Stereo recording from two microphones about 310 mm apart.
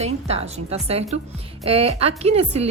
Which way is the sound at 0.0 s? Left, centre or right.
Centre.